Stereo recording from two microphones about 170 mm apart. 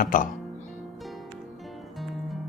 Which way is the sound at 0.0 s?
50° left (ahead or behind).